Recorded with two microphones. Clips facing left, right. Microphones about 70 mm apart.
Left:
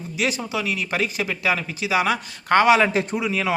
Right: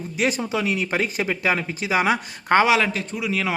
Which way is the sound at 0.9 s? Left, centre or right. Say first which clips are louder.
Right 1 dB; right.